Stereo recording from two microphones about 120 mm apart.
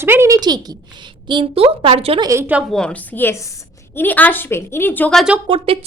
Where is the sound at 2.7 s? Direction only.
10° left (ahead or behind).